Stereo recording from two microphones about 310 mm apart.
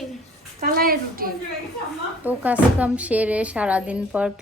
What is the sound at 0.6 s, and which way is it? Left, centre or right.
Speech, right.